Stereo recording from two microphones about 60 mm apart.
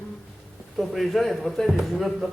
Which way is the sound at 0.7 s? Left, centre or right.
Centre.